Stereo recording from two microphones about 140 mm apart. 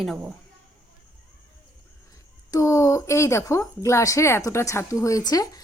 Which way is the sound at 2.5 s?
25° left (ahead or behind).